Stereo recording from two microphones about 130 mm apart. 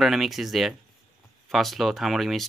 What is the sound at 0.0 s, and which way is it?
Speech, centre (ahead or behind).